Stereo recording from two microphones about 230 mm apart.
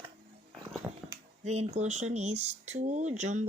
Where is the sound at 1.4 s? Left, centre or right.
Right.